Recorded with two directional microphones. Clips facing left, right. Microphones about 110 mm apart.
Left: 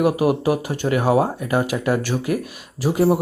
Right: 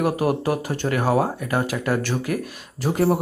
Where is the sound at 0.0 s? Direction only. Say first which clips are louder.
Left 3 dB; 15° left (ahead or behind).